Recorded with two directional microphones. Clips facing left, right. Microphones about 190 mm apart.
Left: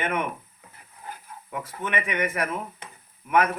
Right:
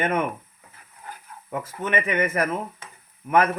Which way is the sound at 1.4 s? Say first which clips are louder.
Right 4 dB; 45° right (ahead or behind).